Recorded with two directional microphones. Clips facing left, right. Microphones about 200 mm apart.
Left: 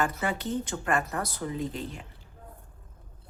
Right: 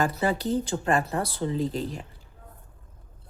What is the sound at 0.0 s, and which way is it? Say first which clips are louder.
Speech: right 4 dB; 35° right (ahead or behind).